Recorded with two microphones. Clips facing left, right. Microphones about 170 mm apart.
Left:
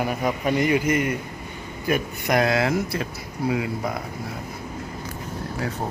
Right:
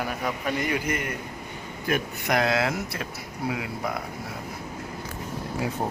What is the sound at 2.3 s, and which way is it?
Speech, centre (ahead or behind).